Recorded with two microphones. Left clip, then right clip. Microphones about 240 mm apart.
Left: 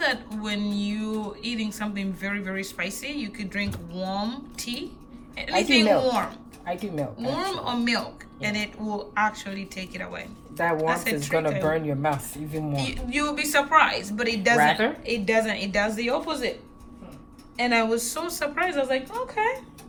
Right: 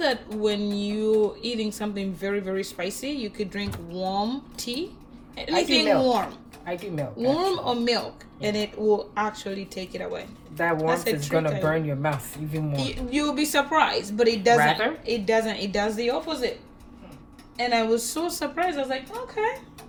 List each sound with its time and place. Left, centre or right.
0.0 s speech: centre
7.3 s speech: centre
11.6 s speech: left
12.7 s speech: centre
17.6 s speech: centre